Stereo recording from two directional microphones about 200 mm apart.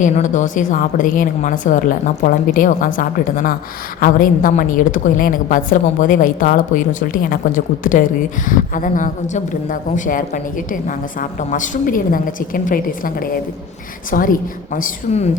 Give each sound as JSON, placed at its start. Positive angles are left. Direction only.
{"t": 0.0, "sound": "a woman's voice", "side_deg": 40}